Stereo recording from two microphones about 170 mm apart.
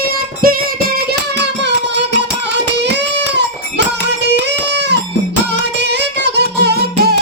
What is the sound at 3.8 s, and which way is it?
Music, 90° right.